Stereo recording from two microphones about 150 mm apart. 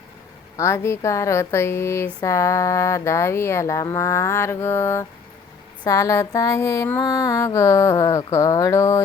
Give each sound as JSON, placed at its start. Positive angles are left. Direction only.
{"t": 0.5, "sound": "mantra", "side_deg": 20}